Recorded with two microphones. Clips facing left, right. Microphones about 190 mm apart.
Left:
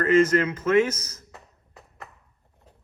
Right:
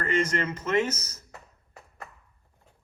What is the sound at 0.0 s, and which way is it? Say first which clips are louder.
Speech: left 8 dB; 5° left (ahead or behind).